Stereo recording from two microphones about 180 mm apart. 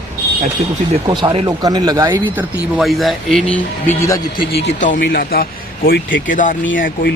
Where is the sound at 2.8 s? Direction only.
Centre (ahead or behind); by 4.5 s 20° left (ahead or behind).